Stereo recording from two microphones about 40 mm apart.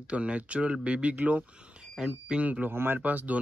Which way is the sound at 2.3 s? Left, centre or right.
Right.